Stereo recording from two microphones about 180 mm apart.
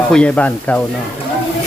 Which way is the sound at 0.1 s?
5° left (ahead or behind).